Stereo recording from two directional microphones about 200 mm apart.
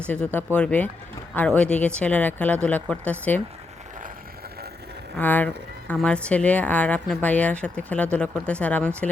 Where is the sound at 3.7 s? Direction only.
35° right (ahead or behind); by 5.1 s 55° right (ahead or behind).